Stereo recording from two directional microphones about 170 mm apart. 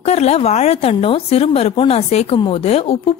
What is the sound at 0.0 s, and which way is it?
A woman's voice, 40° left (ahead or behind).